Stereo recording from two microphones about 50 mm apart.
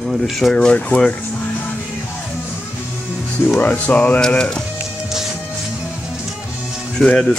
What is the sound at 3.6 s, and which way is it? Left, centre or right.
Music, left.